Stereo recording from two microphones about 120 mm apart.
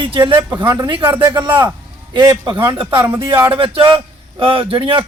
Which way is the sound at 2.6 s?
45° right (ahead or behind).